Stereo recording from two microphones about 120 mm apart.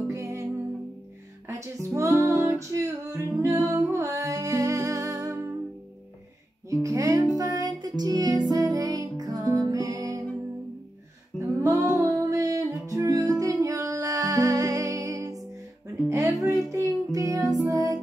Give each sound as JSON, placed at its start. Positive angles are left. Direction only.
{"t": 0.1, "sound": "music", "side_deg": -25}
{"t": 1.5, "sound": "music", "side_deg": -25}
{"t": 6.7, "sound": "music", "side_deg": -25}
{"t": 11.3, "sound": "music", "side_deg": -25}